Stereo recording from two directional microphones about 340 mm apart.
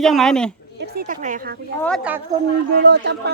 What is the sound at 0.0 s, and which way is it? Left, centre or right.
Speech, centre.